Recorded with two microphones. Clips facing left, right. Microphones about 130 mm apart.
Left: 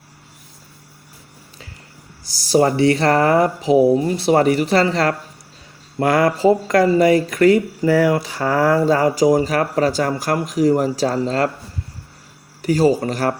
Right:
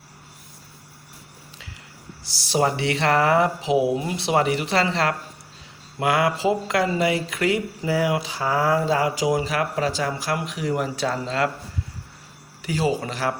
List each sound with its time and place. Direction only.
2.2 s speech: 40° left (ahead or behind)
12.6 s speech: 40° left (ahead or behind)